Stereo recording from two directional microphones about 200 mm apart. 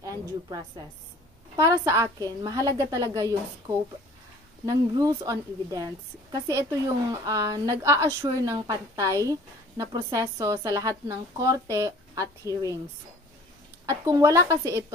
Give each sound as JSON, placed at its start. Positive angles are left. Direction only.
{"t": 1.6, "sound": "a woman's voice", "side_deg": -15}
{"t": 13.8, "sound": "a woman's voice", "side_deg": -15}